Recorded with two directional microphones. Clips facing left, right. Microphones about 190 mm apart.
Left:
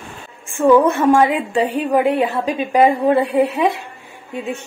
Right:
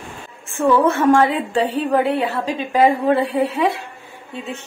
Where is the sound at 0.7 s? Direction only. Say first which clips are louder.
Left 2 dB; 15° left (ahead or behind).